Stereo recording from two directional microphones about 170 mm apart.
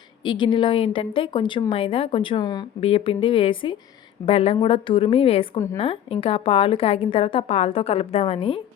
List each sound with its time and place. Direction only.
0.3 s speech: 30° left (ahead or behind)
2.8 s a woman's voice: 35° left (ahead or behind)